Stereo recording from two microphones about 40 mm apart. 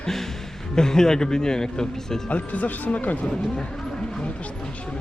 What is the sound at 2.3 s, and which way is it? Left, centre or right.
Speech, left.